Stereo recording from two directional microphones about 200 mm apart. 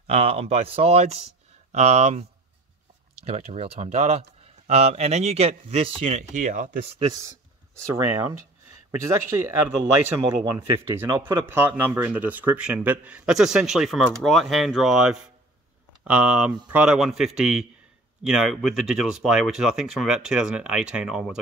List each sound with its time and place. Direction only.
0.0 s speech: 30° right (ahead or behind)
3.3 s speech: 30° right (ahead or behind)
7.2 s speech: 15° right (ahead or behind)
10.0 s speech: 10° right (ahead or behind)